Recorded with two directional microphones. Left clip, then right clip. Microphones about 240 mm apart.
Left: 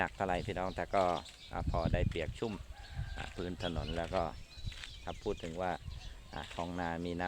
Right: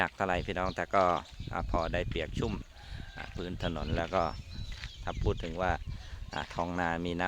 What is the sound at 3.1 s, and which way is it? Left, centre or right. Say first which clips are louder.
Speech: right 1 dB; centre.